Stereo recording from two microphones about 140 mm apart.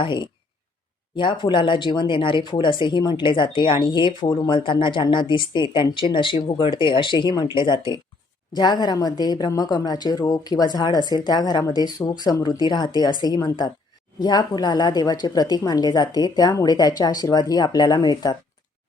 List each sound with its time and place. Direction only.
0.0 s speech: 35° left (ahead or behind)